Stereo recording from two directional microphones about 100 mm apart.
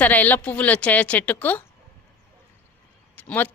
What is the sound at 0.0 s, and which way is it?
A woman's voice, 15° left (ahead or behind).